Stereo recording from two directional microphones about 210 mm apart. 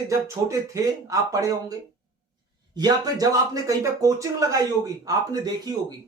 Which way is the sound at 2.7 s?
20° right (ahead or behind).